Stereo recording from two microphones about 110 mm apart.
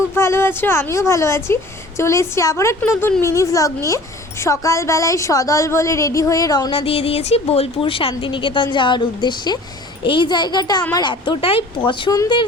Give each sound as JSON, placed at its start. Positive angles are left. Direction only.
{"t": 0.2, "sound": "a woman's voice", "side_deg": 20}
{"t": 6.7, "sound": "a child's voice", "side_deg": 55}